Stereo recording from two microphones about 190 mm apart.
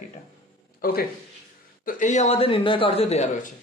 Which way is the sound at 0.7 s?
50° left (ahead or behind).